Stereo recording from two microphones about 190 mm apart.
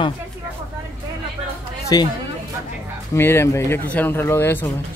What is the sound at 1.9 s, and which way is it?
Speech, 20° left (ahead or behind).